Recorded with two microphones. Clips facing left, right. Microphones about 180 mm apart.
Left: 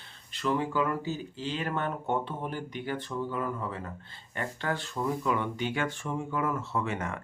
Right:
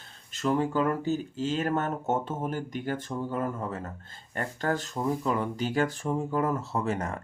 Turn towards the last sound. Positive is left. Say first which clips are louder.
# right 2 dB
turn(degrees=-40)  # may be behind; listen again after turning